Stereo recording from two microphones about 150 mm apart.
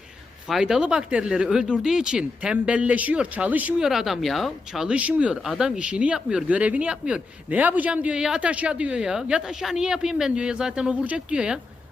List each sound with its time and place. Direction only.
0.4 s speech: 5° right (ahead or behind)